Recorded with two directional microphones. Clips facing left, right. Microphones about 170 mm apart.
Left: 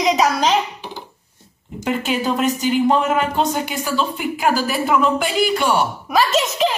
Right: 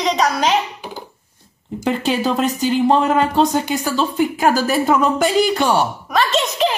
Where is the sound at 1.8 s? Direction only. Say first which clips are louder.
Right 2 dB; 35° right (ahead or behind).